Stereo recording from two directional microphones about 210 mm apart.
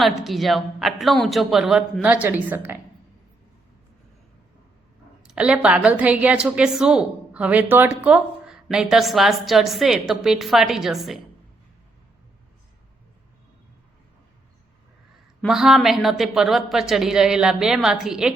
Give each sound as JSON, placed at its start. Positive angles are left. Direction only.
{"t": 0.2, "sound": "a woman's voice", "side_deg": 0}
{"t": 5.2, "sound": "a woman's voice", "side_deg": -5}
{"t": 15.4, "sound": "a woman's voice", "side_deg": 0}